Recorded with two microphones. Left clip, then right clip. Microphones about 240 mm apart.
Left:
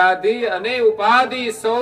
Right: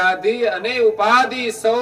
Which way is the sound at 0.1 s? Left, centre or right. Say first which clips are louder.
Even; right.